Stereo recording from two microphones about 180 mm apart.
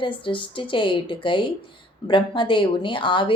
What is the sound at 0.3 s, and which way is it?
A woman's voice, 30° left (ahead or behind).